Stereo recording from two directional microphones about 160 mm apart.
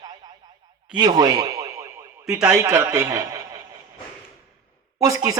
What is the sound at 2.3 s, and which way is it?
Speech, 5° right (ahead or behind).